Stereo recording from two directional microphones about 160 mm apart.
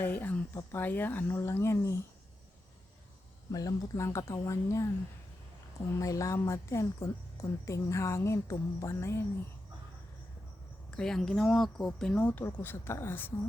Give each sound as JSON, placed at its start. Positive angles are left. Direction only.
{"t": 0.0, "sound": "speech", "side_deg": 10}
{"t": 3.5, "sound": "a woman's voice", "side_deg": 25}
{"t": 6.0, "sound": "a woman's voice", "side_deg": 20}
{"t": 10.9, "sound": "speech", "side_deg": 5}